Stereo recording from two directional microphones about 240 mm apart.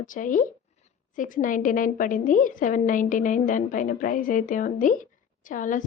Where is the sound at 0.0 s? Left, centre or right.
Left.